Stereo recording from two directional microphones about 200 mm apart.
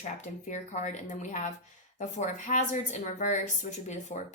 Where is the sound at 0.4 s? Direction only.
40° left (ahead or behind).